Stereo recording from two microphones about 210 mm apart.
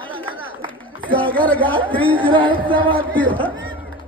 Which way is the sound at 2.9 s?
10° left (ahead or behind).